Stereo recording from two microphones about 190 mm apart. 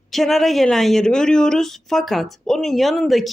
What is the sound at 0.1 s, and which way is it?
Speech, centre (ahead or behind).